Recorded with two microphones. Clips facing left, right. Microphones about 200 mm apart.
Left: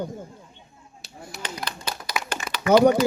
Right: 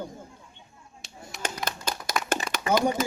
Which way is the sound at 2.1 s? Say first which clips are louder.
Right 3 dB; 45° right (ahead or behind).